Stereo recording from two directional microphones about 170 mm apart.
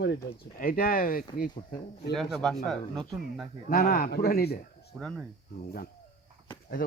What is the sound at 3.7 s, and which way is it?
Speech, 60° left (ahead or behind).